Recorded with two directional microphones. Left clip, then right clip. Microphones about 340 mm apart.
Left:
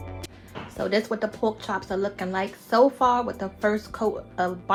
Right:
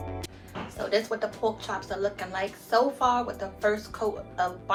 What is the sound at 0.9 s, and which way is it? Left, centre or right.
Speech, left.